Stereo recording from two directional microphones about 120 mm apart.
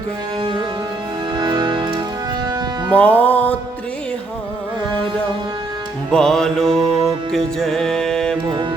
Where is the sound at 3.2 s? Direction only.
15° left (ahead or behind).